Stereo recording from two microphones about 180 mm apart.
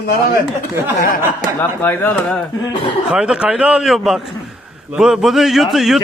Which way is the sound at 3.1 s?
5° right (ahead or behind).